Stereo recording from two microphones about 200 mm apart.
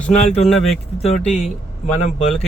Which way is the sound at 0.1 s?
35° left (ahead or behind).